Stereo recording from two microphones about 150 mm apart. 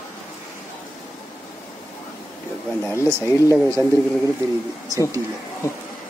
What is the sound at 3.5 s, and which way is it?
Speech, 10° left (ahead or behind).